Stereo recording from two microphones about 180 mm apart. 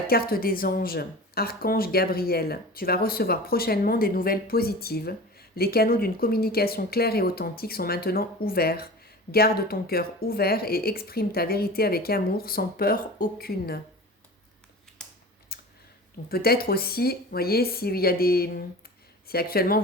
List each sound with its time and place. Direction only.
0.1 s speech: 55° left (ahead or behind)
15.0 s typing: 5° left (ahead or behind)
15.5 s a sound: 60° left (ahead or behind)
16.3 s speech: 55° left (ahead or behind)